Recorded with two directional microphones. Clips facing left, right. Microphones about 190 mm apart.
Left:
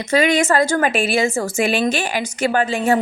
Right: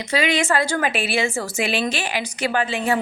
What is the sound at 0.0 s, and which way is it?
A woman's voice, 45° left (ahead or behind).